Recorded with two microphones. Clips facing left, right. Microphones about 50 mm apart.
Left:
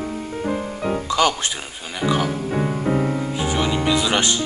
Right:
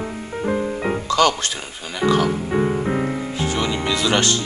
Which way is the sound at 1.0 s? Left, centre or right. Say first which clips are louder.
Right 2 dB; centre.